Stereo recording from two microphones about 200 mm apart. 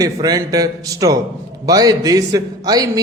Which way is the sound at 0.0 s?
20° right (ahead or behind).